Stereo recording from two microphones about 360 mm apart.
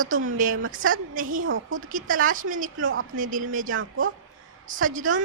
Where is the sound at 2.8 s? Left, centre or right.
Right.